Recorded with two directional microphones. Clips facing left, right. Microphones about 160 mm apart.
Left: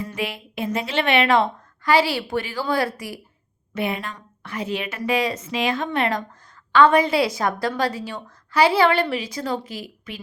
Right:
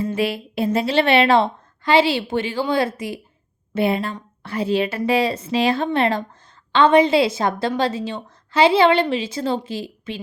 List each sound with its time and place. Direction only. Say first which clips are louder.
0.0 s a woman's voice: right 7 dB; 30° right (ahead or behind)